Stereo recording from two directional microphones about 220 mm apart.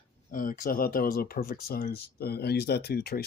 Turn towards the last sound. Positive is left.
turn(degrees=45)  # may be behind; listen again after turning